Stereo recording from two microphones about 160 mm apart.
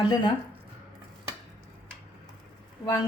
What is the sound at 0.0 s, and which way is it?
Speech, 30° left (ahead or behind).